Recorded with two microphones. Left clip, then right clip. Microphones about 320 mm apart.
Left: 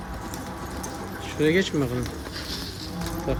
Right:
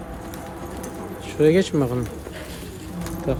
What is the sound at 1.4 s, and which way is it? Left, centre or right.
Speech, right.